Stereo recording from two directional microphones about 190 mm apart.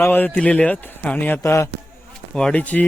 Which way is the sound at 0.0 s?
10° left (ahead or behind).